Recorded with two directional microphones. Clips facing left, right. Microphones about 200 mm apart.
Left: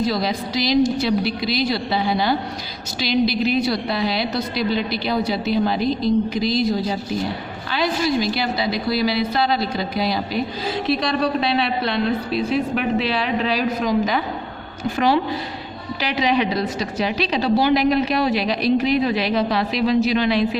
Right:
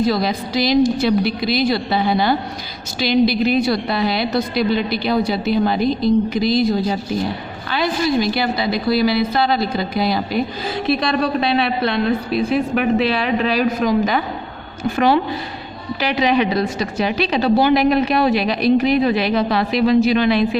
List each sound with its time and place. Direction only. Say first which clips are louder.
0.1 s a woman's voice: right 3 dB; 55° right (ahead or behind)
7.7 s a woman's voice: right 2 dB; 55° right (ahead or behind)